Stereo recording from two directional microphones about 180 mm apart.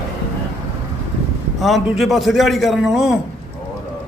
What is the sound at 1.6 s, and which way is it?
A man's voice, centre (ahead or behind).